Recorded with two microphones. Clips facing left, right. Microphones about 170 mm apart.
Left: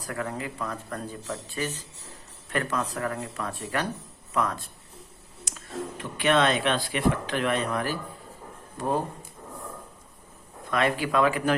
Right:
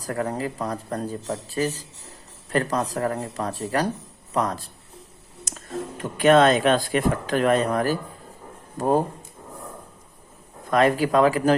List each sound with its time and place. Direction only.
0.1 s speech: 35° right (ahead or behind)
10.7 s speech: 40° right (ahead or behind)